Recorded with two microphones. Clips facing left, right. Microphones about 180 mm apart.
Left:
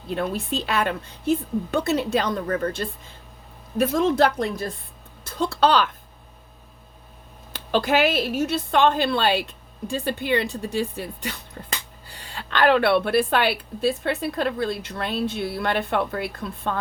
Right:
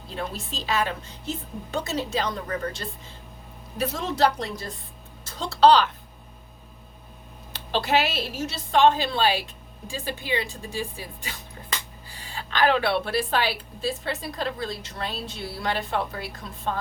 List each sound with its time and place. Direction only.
0.1 s a woman's voice: 60° left (ahead or behind)
3.8 s a woman's voice: 50° left (ahead or behind)
7.5 s a woman's voice: 50° left (ahead or behind)